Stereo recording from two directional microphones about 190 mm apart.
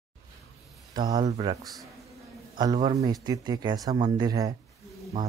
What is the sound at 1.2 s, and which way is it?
A man's voice, 25° right (ahead or behind).